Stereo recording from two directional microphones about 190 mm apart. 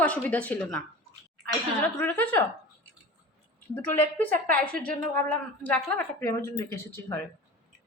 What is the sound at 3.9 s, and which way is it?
A woman's voice, 10° left (ahead or behind).